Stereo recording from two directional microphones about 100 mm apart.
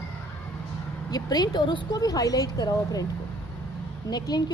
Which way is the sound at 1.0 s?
40° left (ahead or behind).